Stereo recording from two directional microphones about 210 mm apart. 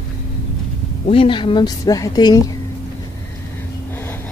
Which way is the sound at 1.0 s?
25° left (ahead or behind).